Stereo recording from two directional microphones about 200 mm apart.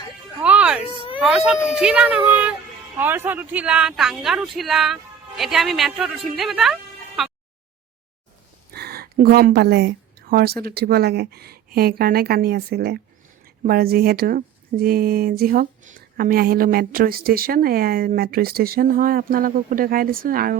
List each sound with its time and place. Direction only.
0.4 s music: 5° right (ahead or behind)
0.9 s a sound: 25° left (ahead or behind)
1.2 s speech: 5° right (ahead or behind)
8.7 s speech: 50° right (ahead or behind)